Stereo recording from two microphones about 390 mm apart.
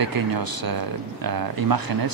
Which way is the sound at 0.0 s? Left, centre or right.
Right.